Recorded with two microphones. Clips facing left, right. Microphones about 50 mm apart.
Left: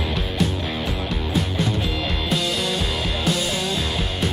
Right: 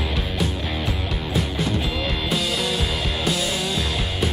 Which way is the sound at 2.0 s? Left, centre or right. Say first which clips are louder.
Even; centre.